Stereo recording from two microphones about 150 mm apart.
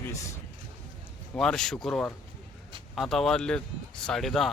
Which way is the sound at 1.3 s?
5° left (ahead or behind).